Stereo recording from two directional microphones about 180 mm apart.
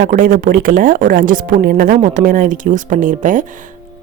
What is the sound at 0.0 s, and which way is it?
A woman's voice, 50° right (ahead or behind).